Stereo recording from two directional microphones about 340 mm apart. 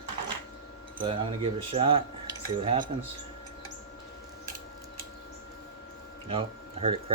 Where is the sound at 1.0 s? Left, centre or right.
Centre.